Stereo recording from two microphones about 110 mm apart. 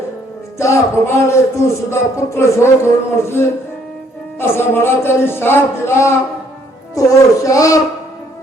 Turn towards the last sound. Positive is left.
turn(degrees=30)  # may be behind; listen again after turning